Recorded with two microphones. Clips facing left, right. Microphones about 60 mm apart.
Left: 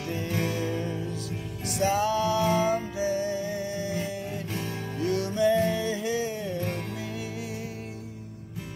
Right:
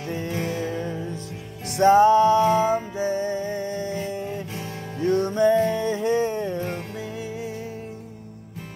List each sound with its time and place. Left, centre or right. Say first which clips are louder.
0.1 s music: right 2 dB; right
1.7 s music: right 10 dB; right
3.0 s music: right 3 dB; right
4.3 s music: right 2 dB; right
6.7 s music: right 2 dB; right